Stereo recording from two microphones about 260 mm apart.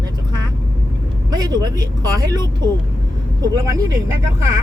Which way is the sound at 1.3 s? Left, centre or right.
Centre.